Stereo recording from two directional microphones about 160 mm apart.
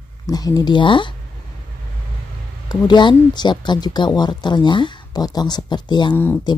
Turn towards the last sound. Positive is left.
turn(degrees=15)  # may be behind; listen again after turning